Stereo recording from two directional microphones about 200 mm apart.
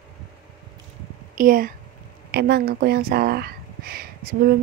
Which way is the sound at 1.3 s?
45° right (ahead or behind).